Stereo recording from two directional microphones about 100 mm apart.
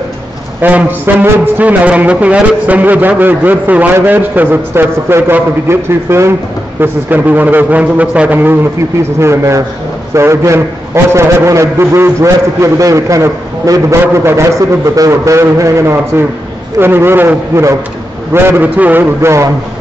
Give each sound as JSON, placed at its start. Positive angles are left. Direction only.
{"t": 0.6, "sound": "speech", "side_deg": -15}
{"t": 9.2, "sound": "a man's voice", "side_deg": -30}